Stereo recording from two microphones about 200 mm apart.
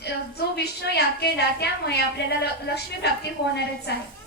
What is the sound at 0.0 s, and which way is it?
A woman's voice, 55° left (ahead or behind).